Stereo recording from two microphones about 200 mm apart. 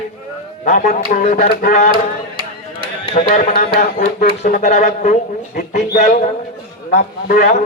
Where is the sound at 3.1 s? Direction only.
40° left (ahead or behind).